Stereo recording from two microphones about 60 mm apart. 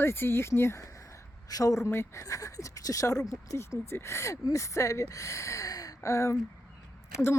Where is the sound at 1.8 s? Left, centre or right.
Left.